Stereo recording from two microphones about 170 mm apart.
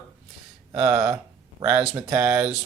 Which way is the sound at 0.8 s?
20° right (ahead or behind).